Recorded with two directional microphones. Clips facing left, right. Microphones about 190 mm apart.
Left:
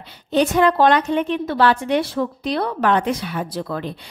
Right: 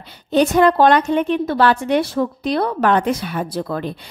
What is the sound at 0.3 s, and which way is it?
A woman's voice, 45° right (ahead or behind).